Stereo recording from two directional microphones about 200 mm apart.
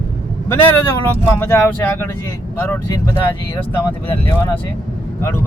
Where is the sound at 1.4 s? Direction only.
10° left (ahead or behind).